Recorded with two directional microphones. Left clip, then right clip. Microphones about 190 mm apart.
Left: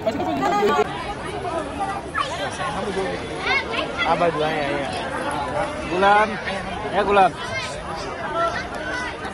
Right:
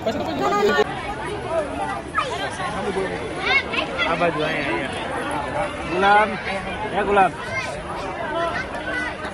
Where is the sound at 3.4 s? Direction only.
55° left (ahead or behind).